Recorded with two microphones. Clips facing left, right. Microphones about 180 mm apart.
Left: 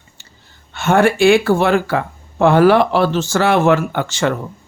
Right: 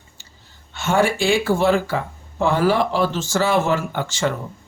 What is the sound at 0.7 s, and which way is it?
Speech, 60° left (ahead or behind).